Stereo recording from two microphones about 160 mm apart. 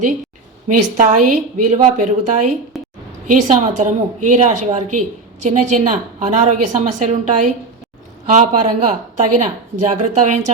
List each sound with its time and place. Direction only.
0.7 s speech: 50° right (ahead or behind)